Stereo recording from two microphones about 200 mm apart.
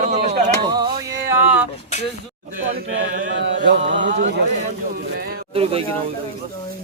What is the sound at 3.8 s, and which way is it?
Mantra, 65° right (ahead or behind).